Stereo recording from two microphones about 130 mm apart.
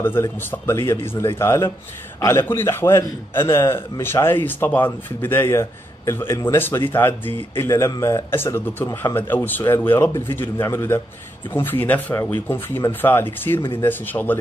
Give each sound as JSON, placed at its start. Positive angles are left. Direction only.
{"t": 0.0, "sound": "speech", "side_deg": 15}